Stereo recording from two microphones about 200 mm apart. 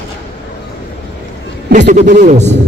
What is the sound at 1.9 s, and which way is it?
Speech, 40° right (ahead or behind).